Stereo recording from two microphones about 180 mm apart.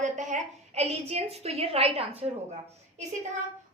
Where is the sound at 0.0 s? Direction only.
45° right (ahead or behind).